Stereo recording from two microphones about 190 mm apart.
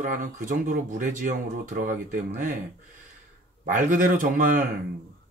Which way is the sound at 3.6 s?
45° right (ahead or behind).